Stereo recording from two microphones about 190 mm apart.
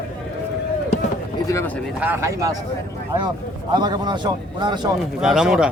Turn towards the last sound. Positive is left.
turn(degrees=-5)  # may be behind; listen again after turning